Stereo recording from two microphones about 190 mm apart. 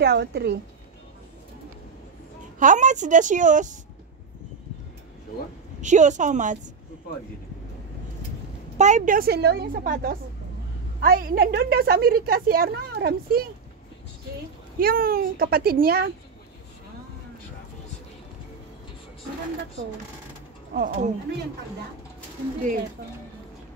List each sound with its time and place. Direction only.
0.0 s a woman's voice: 60° right (ahead or behind)
2.6 s a woman's voice: 40° right (ahead or behind)
5.8 s a woman's voice: 40° right (ahead or behind)
8.7 s a woman's voice: 40° right (ahead or behind); by 13.5 s 55° right (ahead or behind)
14.8 s a woman's voice: 50° right (ahead or behind)
20.7 s a woman's voice: 45° right (ahead or behind)